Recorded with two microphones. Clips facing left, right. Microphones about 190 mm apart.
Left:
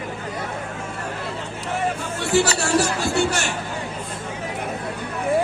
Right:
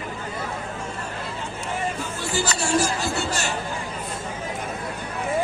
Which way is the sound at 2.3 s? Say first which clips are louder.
Left 4 dB; 65° left (ahead or behind).